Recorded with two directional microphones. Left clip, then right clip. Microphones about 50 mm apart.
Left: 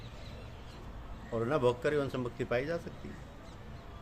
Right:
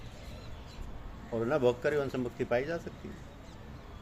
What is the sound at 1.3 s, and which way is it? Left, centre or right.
Speech, left.